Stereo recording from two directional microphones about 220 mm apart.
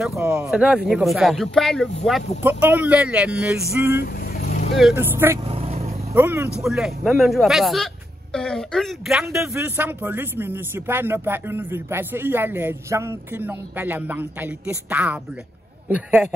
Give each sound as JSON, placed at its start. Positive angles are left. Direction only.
{"t": 0.0, "sound": "speech", "side_deg": -5}
{"t": 4.7, "sound": "speech", "side_deg": -5}
{"t": 5.5, "sound": "vehicle", "side_deg": -25}
{"t": 6.1, "sound": "speech", "side_deg": -10}